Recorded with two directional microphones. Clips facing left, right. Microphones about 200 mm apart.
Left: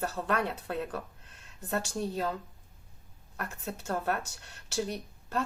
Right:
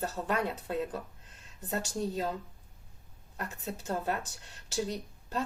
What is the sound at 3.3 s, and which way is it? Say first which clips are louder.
Speech: even; 20° right (ahead or behind).